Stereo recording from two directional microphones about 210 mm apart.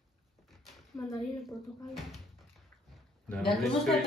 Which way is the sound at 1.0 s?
15° left (ahead or behind).